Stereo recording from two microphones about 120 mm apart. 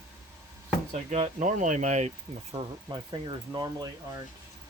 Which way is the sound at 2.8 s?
40° right (ahead or behind).